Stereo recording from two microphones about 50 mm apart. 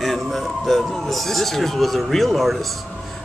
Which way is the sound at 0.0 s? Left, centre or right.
Centre.